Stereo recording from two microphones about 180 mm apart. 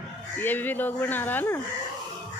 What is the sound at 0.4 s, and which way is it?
Speech, 10° left (ahead or behind).